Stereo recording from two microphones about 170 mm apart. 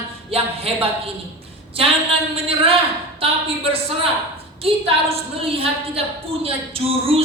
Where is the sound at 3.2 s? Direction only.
35° right (ahead or behind).